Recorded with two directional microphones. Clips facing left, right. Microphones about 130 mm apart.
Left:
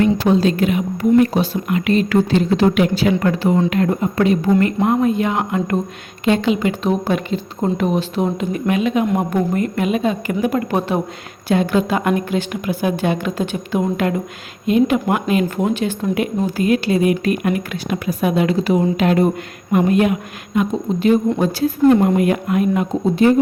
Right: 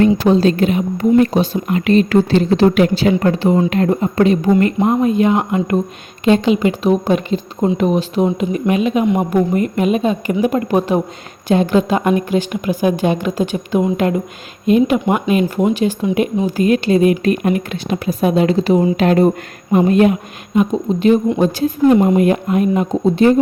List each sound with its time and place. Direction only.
0.0 s speech: 30° right (ahead or behind)
7.8 s a woman's voice: 15° right (ahead or behind)
16.6 s speech: 25° right (ahead or behind)